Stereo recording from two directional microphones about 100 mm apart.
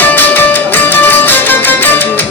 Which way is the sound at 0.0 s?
20° left (ahead or behind).